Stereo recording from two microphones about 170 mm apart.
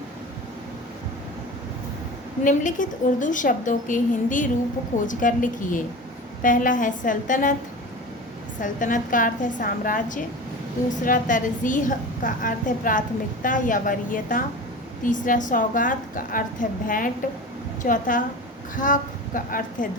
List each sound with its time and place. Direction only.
2.4 s a woman's voice: 50° left (ahead or behind)
8.6 s a woman's voice: 50° left (ahead or behind)